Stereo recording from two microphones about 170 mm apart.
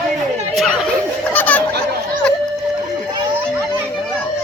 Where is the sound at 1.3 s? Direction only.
10° left (ahead or behind).